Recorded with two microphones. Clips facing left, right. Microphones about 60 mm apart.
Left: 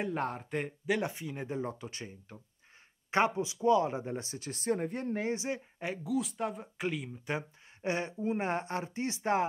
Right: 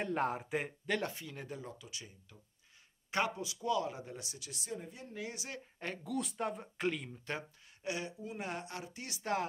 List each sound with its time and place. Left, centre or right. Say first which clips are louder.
0.0 s speech: left 1 dB; centre
0.8 s speech: left 4 dB; centre
1.6 s speech: left 10 dB; left
3.1 s speech: left 6 dB; left
5.8 s speech: left 3 dB; centre
7.3 s speech: left 5 dB; centre
7.8 s speech: left 7 dB; left